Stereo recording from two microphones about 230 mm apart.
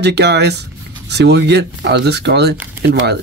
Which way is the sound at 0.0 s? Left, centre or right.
Right.